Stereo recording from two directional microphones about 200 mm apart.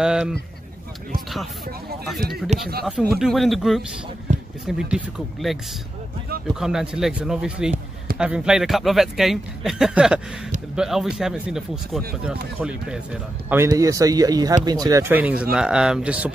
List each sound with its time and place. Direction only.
0.0 s speech: centre (ahead or behind)
2.8 s speech: centre (ahead or behind)
4.3 s a sound: 35° right (ahead or behind)
4.6 s speech: 5° right (ahead or behind)